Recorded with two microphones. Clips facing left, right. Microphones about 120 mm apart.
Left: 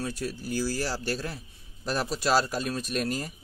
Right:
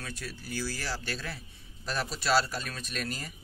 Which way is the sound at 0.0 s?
40° left (ahead or behind).